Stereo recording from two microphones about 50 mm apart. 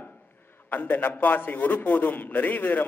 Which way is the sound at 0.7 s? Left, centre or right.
Left.